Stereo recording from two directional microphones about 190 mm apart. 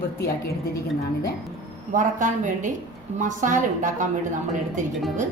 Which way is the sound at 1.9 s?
40° right (ahead or behind).